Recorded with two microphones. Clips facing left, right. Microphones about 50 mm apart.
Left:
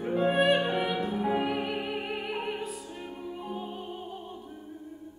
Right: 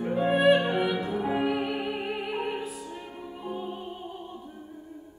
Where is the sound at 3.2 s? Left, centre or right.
Centre.